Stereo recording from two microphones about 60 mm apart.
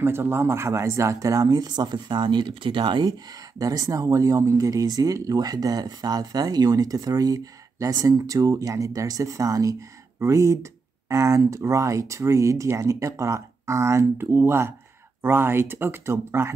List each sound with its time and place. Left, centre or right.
0.0 s speech: right
3.1 s speech: right